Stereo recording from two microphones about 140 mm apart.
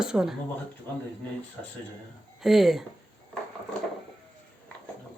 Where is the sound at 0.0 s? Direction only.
5° right (ahead or behind).